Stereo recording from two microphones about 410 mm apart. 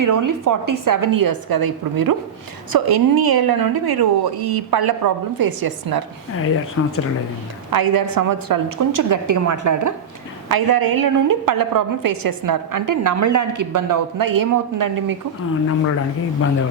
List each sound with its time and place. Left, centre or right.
0.0 s a woman's voice: right
6.8 s speech: left
7.7 s a woman's voice: right
10.5 s a woman's voice: right